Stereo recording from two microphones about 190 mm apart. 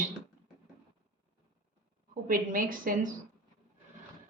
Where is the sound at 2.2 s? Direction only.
45° right (ahead or behind).